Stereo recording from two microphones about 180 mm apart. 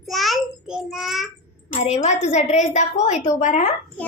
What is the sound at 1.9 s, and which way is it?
A woman's voice, 40° left (ahead or behind).